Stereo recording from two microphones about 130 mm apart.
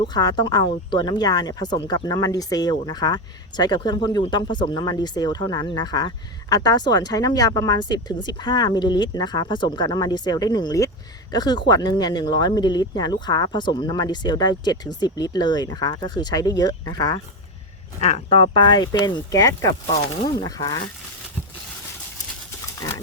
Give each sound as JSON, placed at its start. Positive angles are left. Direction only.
{"t": 0.0, "sound": "speech", "side_deg": 30}
{"t": 18.0, "sound": "speech", "side_deg": 50}